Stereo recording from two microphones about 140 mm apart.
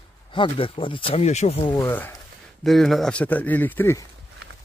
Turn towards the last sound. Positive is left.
turn(degrees=15)  # may be behind; listen again after turning